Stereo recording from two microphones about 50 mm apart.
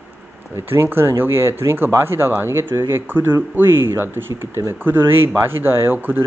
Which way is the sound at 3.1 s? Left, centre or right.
Right.